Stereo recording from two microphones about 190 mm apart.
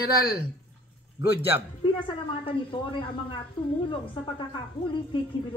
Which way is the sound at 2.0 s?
25° left (ahead or behind).